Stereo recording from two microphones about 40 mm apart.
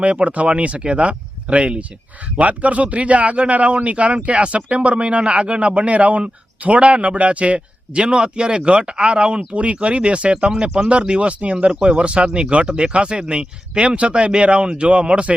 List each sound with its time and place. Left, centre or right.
0.0 s speech: right
5.3 s speech: centre
5.5 s speech: right
10.5 s speech: centre